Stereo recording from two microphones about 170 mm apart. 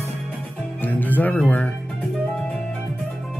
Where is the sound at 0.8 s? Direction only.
10° left (ahead or behind).